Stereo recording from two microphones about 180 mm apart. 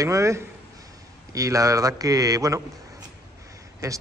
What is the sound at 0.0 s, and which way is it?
Speech, 15° right (ahead or behind).